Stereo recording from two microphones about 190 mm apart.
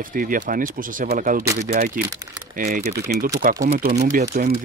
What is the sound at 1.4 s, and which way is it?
Speech, 15° right (ahead or behind).